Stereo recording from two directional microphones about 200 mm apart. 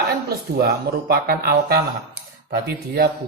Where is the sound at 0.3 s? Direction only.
50° right (ahead or behind).